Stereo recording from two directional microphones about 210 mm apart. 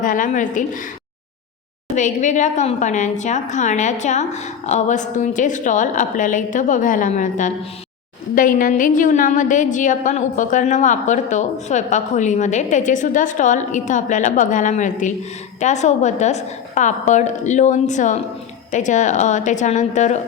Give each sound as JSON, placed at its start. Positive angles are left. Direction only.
{"t": 0.0, "sound": "a woman's voice", "side_deg": 40}
{"t": 2.0, "sound": "a woman's voice", "side_deg": 35}